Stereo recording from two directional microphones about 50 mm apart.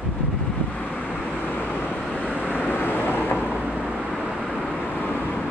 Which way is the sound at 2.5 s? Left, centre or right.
Left.